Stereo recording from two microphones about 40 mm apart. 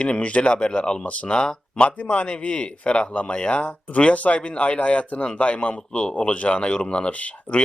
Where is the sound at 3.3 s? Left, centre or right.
Left.